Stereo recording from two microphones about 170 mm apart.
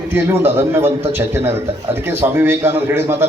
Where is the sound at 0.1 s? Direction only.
15° right (ahead or behind).